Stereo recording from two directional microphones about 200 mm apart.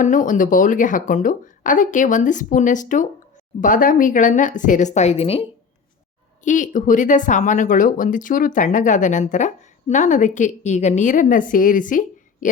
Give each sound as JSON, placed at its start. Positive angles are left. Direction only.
{"t": 0.0, "sound": "speech", "side_deg": 40}